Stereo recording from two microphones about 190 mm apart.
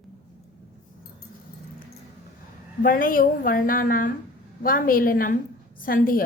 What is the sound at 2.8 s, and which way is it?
A woman's voice, 45° left (ahead or behind).